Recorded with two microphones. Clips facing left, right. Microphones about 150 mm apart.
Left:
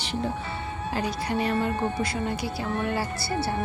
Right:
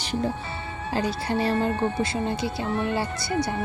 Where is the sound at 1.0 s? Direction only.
30° right (ahead or behind).